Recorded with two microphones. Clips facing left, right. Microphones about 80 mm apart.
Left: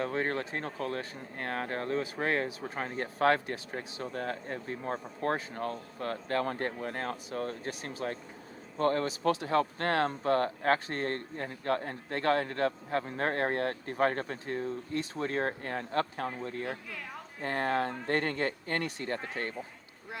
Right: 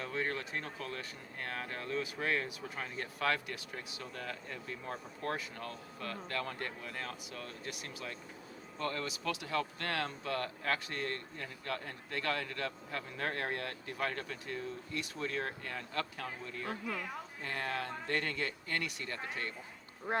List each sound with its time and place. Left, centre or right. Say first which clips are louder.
0.0 s speech: left 6 dB; left